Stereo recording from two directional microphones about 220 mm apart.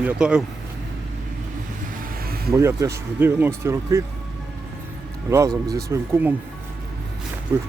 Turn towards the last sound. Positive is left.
turn(degrees=-10)  # may be behind; listen again after turning